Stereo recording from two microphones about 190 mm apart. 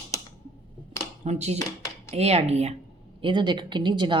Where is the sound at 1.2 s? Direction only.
35° right (ahead or behind).